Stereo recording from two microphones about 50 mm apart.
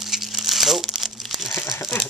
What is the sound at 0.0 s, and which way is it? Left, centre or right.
Crumpling, centre.